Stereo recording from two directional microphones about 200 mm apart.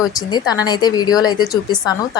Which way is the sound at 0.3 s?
20° left (ahead or behind).